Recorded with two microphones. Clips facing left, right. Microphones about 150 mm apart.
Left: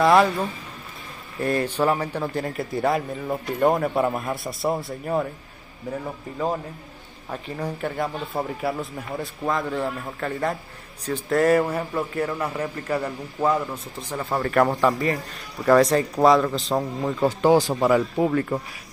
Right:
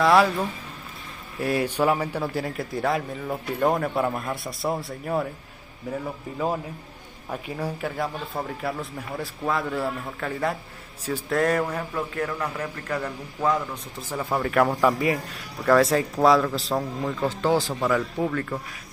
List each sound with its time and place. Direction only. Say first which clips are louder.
0.0 s speech: left 1 dB; centre (ahead or behind)
1.4 s speech: left 1 dB; 10° right (ahead or behind)
7.2 s a man's voice: even; 5° right (ahead or behind); by 13.7 s 10° left (ahead or behind)
13.9 s speech: even; 5° right (ahead or behind)
16.7 s a man's voice: left 3 dB; 20° left (ahead or behind)